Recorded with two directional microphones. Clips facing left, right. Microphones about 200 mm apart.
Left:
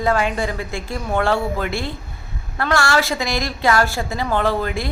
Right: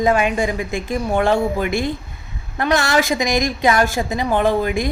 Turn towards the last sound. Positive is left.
turn(degrees=-15)  # may be behind; listen again after turning